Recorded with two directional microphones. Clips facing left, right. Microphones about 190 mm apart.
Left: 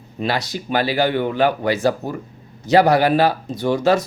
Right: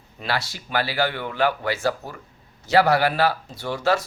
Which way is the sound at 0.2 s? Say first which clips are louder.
Left 6 dB; 20° left (ahead or behind).